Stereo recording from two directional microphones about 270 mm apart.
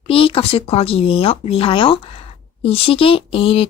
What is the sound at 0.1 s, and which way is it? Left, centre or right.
Speech, left.